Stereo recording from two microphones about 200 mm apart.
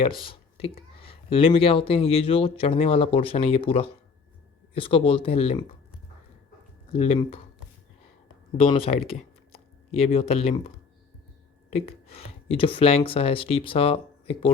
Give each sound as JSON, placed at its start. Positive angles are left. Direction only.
{"t": 0.0, "sound": "speech", "side_deg": 25}
{"t": 6.9, "sound": "speech", "side_deg": 30}
{"t": 8.5, "sound": "speech", "side_deg": 30}
{"t": 11.7, "sound": "speech", "side_deg": 30}